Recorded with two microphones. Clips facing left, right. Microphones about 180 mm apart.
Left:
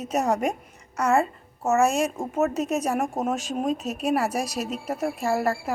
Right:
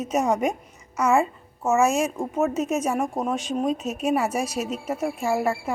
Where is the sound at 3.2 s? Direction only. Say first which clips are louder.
Even; 45° left (ahead or behind).